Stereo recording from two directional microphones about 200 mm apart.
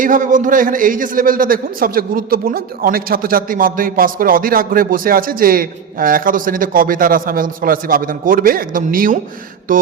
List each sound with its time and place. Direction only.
0.0 s a man's voice: 40° right (ahead or behind)